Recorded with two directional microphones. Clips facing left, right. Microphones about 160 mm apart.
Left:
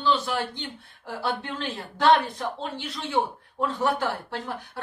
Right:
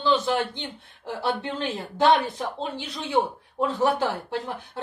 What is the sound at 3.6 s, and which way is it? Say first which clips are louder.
Speech: right 2 dB; 20° right (ahead or behind).